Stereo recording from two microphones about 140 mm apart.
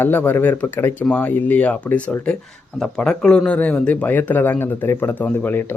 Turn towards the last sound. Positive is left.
turn(degrees=10)  # may be behind; listen again after turning